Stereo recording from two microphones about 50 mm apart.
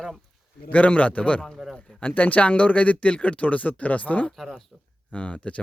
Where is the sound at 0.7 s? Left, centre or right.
Left.